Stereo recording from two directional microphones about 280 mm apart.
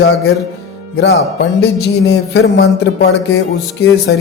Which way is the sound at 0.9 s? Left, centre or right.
Left.